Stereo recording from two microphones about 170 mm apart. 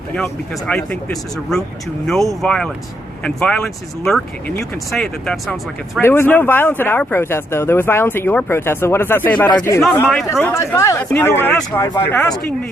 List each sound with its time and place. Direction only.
0.7 s speech: 5° left (ahead or behind)